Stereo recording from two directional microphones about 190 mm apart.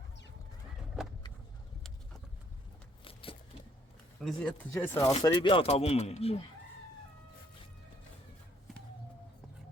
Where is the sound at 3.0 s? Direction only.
30° left (ahead or behind).